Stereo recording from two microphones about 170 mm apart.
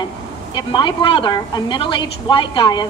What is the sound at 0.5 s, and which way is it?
A woman's voice, 25° left (ahead or behind).